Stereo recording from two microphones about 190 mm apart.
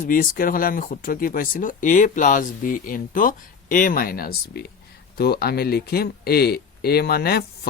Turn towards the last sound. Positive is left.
turn(degrees=55)  # may be behind; listen again after turning